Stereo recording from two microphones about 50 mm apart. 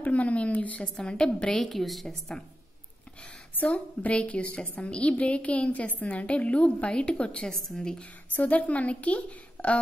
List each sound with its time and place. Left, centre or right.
0.0 s a woman's voice: left
1.6 s a woman's voice: centre
4.0 s a woman's voice: left
7.6 s a woman's voice: centre
8.0 s a woman's voice: left